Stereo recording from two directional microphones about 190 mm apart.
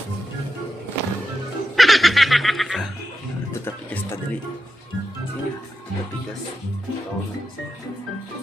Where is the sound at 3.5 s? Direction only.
15° left (ahead or behind).